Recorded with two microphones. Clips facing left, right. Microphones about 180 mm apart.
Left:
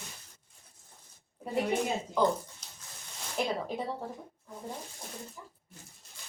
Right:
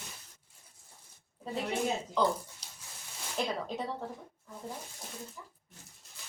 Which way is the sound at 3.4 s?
10° left (ahead or behind).